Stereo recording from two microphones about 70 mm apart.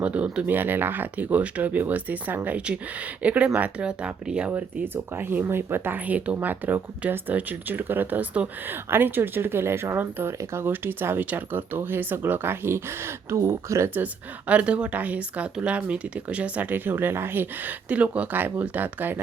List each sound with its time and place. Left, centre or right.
0.0 s speech: centre; by 13.9 s right
13.9 s speech: right